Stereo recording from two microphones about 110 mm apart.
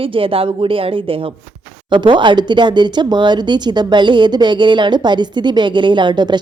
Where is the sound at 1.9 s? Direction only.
45° right (ahead or behind).